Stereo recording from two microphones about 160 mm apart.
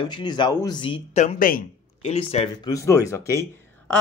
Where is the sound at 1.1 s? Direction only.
45° left (ahead or behind).